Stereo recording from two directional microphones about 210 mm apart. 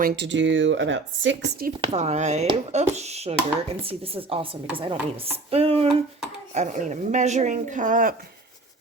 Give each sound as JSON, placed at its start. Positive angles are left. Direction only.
{"t": 0.0, "sound": "speech", "side_deg": -55}
{"t": 1.8, "sound": "speech", "side_deg": -30}